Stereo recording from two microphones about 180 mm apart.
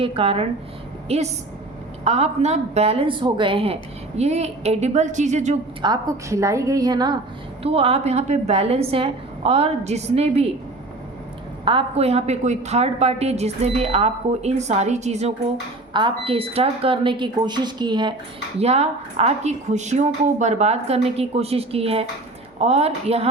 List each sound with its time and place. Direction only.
0.0 s a woman's voice: 30° right (ahead or behind)
5.8 s speech: 20° right (ahead or behind)
7.6 s a woman's voice: 35° right (ahead or behind)
11.6 s a woman's voice: 30° right (ahead or behind)
15.9 s speech: 25° right (ahead or behind)
18.6 s a woman's voice: 35° right (ahead or behind)